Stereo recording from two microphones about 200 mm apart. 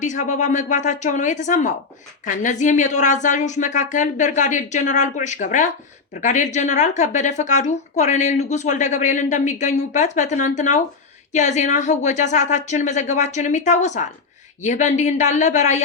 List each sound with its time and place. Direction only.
0.0 s speech: 40° left (ahead or behind)